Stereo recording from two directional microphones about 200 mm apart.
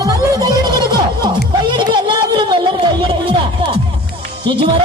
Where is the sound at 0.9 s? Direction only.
20° right (ahead or behind).